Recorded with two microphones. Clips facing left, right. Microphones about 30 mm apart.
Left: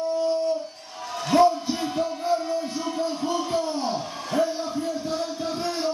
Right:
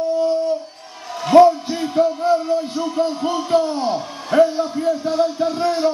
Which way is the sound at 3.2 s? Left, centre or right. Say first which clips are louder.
Right 7 dB; right.